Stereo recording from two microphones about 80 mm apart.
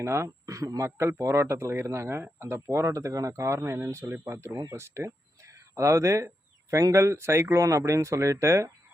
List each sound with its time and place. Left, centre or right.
0.0 s speech: right